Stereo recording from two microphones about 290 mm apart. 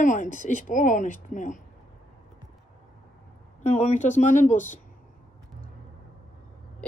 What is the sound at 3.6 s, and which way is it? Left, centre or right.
Speech, left.